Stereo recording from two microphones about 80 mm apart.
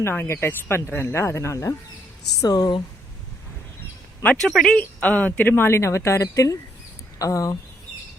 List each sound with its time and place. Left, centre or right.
0.0 s speech: left
2.4 s speech: left
4.4 s speech: centre
4.8 s speech: centre; by 7.6 s left